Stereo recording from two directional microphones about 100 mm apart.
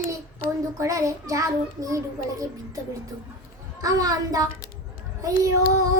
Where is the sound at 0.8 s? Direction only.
30° right (ahead or behind).